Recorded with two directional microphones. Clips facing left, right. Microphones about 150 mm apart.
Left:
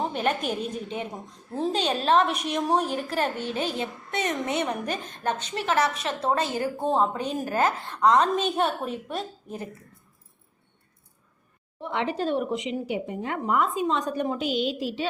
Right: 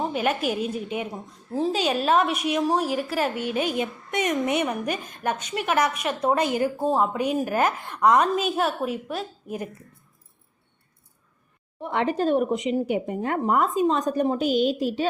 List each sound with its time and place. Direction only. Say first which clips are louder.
0.1 s a woman's voice: right 2 dB; 10° right (ahead or behind)
6.7 s a woman's voice: right 1 dB; 5° right (ahead or behind)
11.8 s a woman's voice: right 4 dB; 50° right (ahead or behind)